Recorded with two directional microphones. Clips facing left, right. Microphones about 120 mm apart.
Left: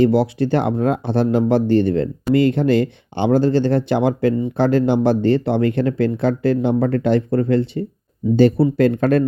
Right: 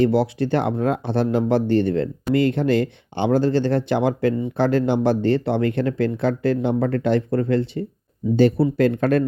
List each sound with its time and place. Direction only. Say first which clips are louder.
0.0 s speech: left 3 dB; 20° left (ahead or behind); by 9.2 s 35° left (ahead or behind)